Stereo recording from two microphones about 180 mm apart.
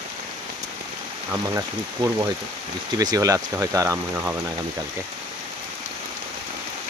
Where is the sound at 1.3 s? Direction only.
20° right (ahead or behind).